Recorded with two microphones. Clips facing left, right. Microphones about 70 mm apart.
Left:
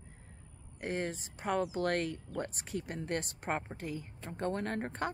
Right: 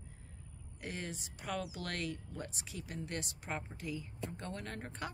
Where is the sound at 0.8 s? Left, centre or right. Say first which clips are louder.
Left 7 dB; left.